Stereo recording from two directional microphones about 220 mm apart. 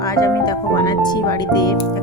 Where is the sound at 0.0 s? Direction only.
15° left (ahead or behind).